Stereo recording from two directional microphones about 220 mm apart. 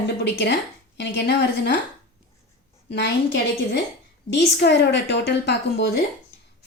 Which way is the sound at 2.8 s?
50° left (ahead or behind).